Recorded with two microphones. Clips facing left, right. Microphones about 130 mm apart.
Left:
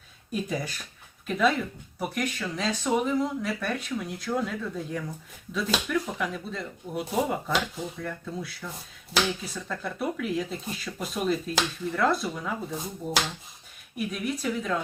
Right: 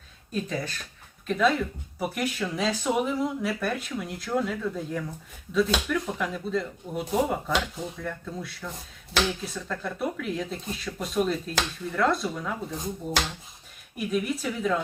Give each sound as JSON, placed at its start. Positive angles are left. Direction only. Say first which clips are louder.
{"t": 0.3, "sound": "speech", "louder": "even", "side_deg": 10}